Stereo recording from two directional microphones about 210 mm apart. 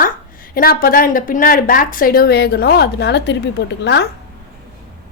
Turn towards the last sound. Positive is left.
turn(degrees=55)  # may be behind; listen again after turning